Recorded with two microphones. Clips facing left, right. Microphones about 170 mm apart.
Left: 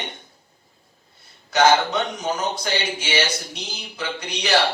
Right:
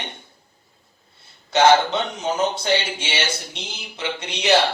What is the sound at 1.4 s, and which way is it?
Speech, 30° right (ahead or behind).